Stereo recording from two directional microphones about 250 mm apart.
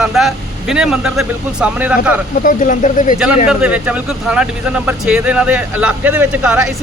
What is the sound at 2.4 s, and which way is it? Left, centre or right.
Speech, left.